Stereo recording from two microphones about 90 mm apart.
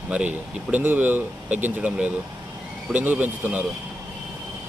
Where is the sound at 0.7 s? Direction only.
20° right (ahead or behind).